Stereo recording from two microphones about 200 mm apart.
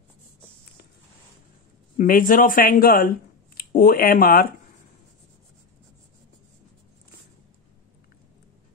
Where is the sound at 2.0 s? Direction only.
45° left (ahead or behind).